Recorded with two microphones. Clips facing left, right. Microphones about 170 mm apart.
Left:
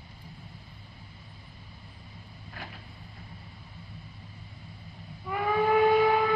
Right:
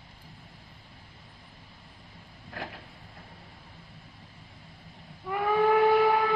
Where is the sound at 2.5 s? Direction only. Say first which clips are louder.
Right 5 dB; 70° right (ahead or behind).